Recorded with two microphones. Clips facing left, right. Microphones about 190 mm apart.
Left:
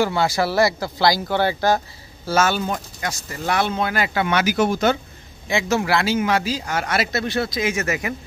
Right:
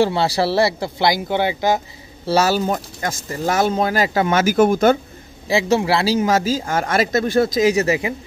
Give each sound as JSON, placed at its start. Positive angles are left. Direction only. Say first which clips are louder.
{"t": 0.0, "sound": "speech", "louder": "right 3 dB", "side_deg": -30}
{"t": 2.2, "sound": "speech", "louder": "right 3 dB", "side_deg": -35}
{"t": 5.5, "sound": "speech", "louder": "right 3 dB", "side_deg": -30}